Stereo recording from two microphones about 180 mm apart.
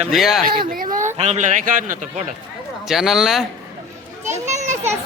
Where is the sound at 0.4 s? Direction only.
25° right (ahead or behind).